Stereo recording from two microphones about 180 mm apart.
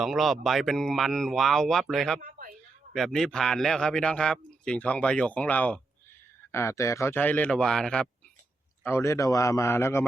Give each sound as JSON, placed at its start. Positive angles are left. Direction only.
{"t": 0.0, "sound": "a man's voice", "side_deg": 0}
{"t": 8.8, "sound": "speech", "side_deg": 15}